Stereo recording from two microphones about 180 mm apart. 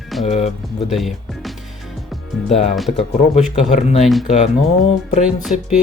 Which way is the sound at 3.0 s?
40° left (ahead or behind).